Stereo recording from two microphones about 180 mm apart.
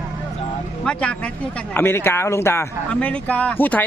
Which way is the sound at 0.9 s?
5° left (ahead or behind).